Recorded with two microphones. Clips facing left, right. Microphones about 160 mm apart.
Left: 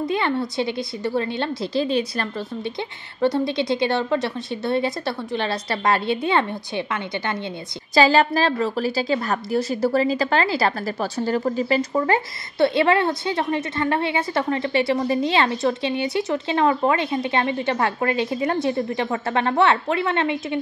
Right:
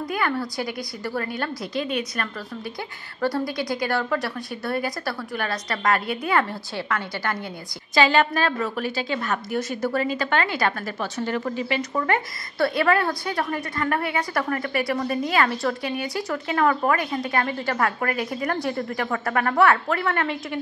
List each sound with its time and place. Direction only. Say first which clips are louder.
0.0 s a woman's voice: left 3 dB; 25° left (ahead or behind)
7.9 s a woman's voice: left 3 dB; 35° left (ahead or behind)